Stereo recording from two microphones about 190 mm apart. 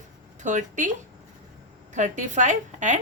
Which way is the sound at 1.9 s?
40° right (ahead or behind).